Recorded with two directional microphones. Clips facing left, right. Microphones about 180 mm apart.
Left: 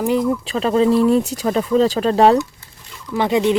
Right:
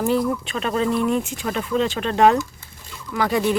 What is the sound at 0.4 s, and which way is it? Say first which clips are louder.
Speech: left 7 dB; 30° left (ahead or behind).